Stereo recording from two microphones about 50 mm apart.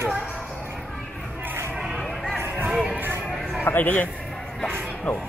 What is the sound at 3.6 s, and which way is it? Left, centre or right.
Speech, left.